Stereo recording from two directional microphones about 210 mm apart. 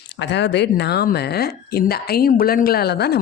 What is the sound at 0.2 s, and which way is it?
Speech, 55° left (ahead or behind).